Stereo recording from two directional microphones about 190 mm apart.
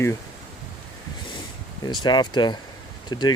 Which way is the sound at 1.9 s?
25° left (ahead or behind).